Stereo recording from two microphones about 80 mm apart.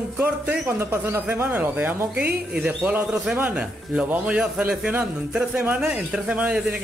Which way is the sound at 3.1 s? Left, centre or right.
Centre.